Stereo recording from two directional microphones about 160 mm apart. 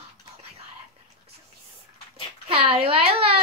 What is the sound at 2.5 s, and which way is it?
Speech, 35° right (ahead or behind).